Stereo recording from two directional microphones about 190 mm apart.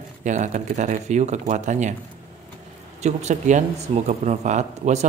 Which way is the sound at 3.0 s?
35° right (ahead or behind).